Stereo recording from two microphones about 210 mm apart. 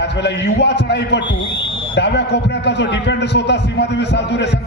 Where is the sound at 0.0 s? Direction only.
55° left (ahead or behind).